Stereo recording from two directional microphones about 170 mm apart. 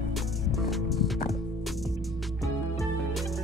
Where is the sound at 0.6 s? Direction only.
Centre (ahead or behind).